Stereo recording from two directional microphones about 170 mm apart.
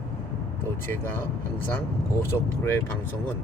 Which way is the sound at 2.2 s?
15° left (ahead or behind).